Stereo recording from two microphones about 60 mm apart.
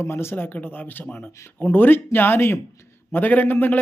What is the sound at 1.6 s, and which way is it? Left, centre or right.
Speech, left.